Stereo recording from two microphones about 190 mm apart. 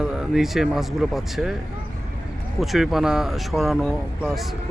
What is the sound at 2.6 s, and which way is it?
Speech, centre (ahead or behind).